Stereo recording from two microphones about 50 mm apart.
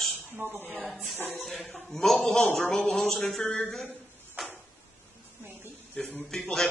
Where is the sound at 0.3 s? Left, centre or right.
Right.